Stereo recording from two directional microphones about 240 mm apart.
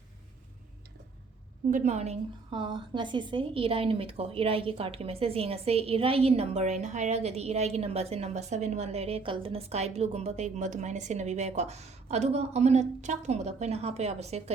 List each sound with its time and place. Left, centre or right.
1.7 s a woman's voice: right